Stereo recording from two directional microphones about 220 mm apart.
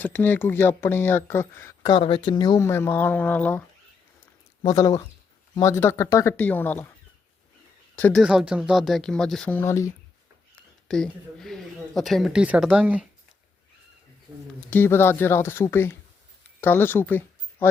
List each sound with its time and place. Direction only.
0.0 s speech: 10° left (ahead or behind)
4.6 s speech: 15° left (ahead or behind)
7.9 s speech: 5° left (ahead or behind)
8.2 s speech: 5° right (ahead or behind)
14.7 s speech: 10° left (ahead or behind)